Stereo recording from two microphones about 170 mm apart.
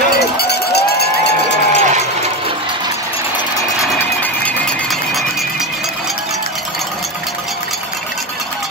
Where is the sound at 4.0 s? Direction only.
10° left (ahead or behind).